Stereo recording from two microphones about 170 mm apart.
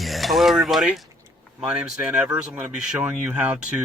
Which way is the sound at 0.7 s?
Centre (ahead or behind).